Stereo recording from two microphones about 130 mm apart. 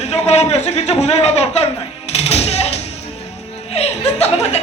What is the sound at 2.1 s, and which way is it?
Music, 55° left (ahead or behind).